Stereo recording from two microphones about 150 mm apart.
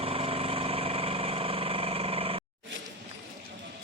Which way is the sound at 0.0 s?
40° right (ahead or behind).